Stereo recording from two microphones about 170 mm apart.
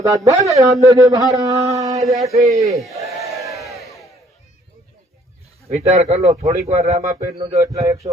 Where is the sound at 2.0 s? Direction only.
Centre (ahead or behind).